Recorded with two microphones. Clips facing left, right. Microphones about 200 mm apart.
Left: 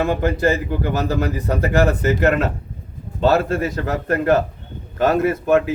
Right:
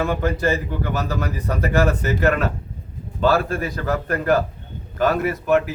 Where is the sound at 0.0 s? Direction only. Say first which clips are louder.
Left 3 dB; 25° left (ahead or behind).